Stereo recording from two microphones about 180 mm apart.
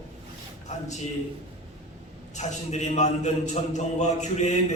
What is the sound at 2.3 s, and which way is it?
Speech, 40° left (ahead or behind).